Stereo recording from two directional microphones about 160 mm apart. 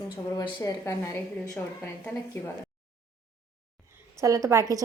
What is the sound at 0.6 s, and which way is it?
Speech, 20° left (ahead or behind).